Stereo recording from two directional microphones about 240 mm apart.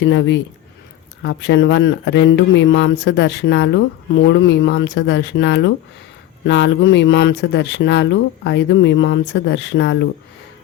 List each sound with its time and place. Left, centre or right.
0.0 s speech: left